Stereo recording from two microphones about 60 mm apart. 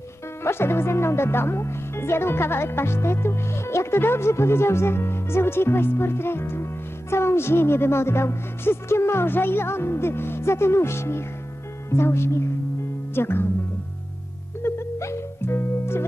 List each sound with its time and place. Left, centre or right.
0.4 s speech: left
14.6 s music: left